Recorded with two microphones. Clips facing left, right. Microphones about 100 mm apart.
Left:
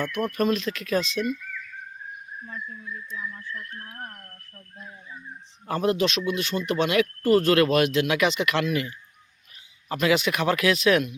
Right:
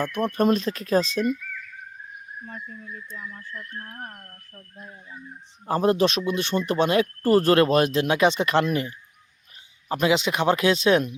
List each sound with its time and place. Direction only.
0.0 s speech: 30° right (ahead or behind)
2.5 s a sound: 55° right (ahead or behind)
5.6 s speech: 30° right (ahead or behind)